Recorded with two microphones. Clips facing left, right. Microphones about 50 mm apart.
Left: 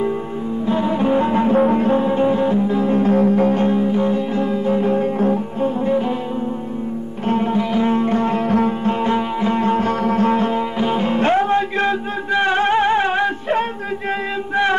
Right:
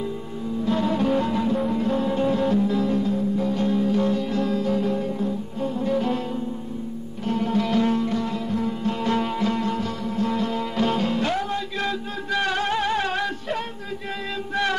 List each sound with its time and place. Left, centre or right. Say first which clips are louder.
0.7 s music: left 4 dB; left
2.0 s music: left 6 dB; left
3.0 s music: left 9 dB; left
7.2 s music: left 6 dB; left
7.5 s music: left 4 dB; left
8.0 s music: left 7 dB; left
9.1 s music: left 4 dB; left
9.6 s music: left 9 dB; left
10.8 s music: left 1 dB; centre
11.1 s music: left 8 dB; left